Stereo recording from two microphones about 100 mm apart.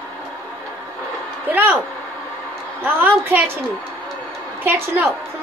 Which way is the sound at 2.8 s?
20° right (ahead or behind).